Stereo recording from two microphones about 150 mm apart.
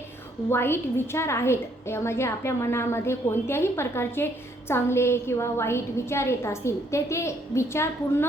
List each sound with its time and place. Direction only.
0.5 s a woman's voice: 15° left (ahead or behind)